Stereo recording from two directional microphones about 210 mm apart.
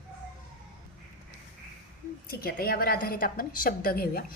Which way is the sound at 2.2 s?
45° left (ahead or behind).